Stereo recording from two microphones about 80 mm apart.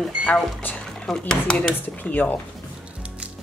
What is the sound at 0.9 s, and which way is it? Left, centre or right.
Dishes, centre.